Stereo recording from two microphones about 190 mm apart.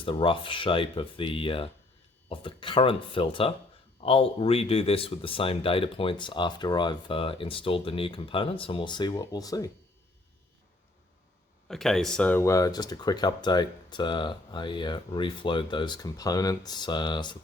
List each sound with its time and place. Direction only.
0.0 s speech: 25° left (ahead or behind)
11.7 s speech: centre (ahead or behind); by 17.3 s 25° left (ahead or behind)